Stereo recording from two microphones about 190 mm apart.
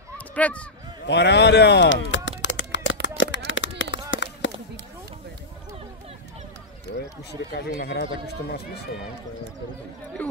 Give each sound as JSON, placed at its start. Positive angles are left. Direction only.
{"t": 0.3, "sound": "speech", "side_deg": 5}
{"t": 1.0, "sound": "speech", "side_deg": 65}
{"t": 2.4, "sound": "a sound", "side_deg": 75}
{"t": 7.5, "sound": "speech", "side_deg": 55}